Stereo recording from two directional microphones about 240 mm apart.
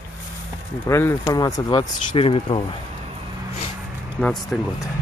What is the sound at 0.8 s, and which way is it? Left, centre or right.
Speech, centre.